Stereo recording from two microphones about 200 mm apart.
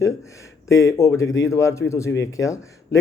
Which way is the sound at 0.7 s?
15° left (ahead or behind).